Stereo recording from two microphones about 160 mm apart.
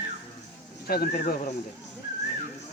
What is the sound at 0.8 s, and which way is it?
Speech, 70° left (ahead or behind).